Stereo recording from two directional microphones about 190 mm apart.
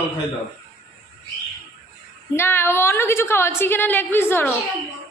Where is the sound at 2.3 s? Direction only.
10° left (ahead or behind).